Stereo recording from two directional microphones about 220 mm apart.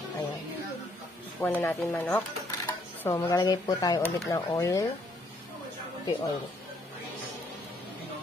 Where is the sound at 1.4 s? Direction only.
10° left (ahead or behind).